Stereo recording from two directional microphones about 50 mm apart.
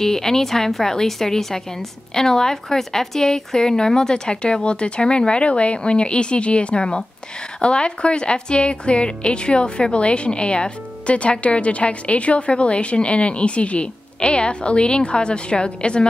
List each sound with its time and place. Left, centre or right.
0.0 s a woman's voice: centre